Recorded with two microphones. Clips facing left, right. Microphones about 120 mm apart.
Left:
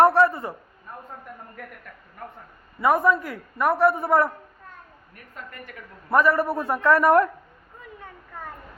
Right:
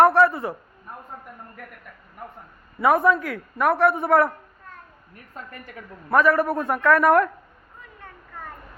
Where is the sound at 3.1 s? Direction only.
25° left (ahead or behind).